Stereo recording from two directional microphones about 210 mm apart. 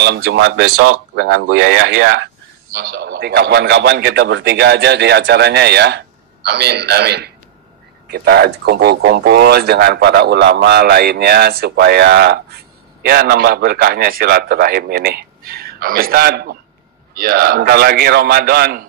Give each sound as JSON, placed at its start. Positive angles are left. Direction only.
{"t": 0.0, "sound": "speech", "side_deg": -55}
{"t": 1.1, "sound": "speech", "side_deg": -50}